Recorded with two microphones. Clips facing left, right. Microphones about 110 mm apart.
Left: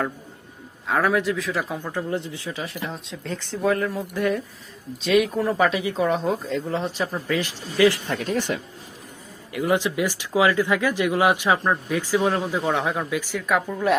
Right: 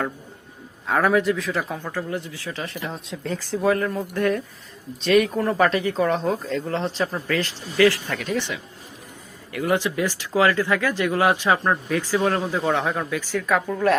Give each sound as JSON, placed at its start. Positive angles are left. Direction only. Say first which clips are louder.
{"t": 0.9, "sound": "speech", "louder": "right 2 dB", "side_deg": 0}
{"t": 1.8, "sound": "speech", "louder": "left 1 dB", "side_deg": 15}
{"t": 2.5, "sound": "speech", "louder": "right 1 dB", "side_deg": 5}
{"t": 8.3, "sound": "speech", "louder": "left 1 dB", "side_deg": 45}
{"t": 9.5, "sound": "speech", "louder": "even", "side_deg": 20}